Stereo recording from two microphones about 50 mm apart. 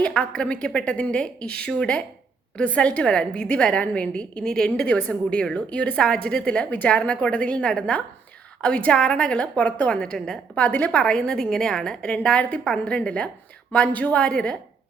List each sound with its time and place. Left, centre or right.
0.0 s a woman's voice: left
9.9 s a woman's voice: centre; by 11.0 s left
11.0 s a woman's voice: centre